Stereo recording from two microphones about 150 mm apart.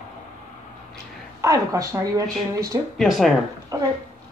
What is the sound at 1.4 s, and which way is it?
Speech, 20° right (ahead or behind).